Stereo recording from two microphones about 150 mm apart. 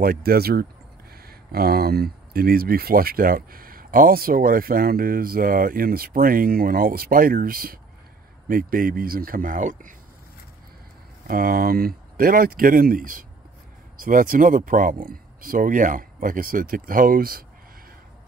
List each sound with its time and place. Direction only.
0.0 s speech: 80° right; by 9.9 s 60° right (ahead or behind)
11.2 s speech: 70° right (ahead or behind)